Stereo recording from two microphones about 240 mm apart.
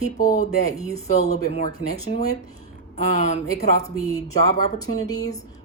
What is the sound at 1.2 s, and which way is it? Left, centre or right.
Speech, left.